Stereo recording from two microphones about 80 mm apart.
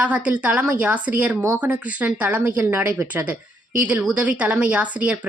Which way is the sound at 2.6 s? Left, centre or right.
Right.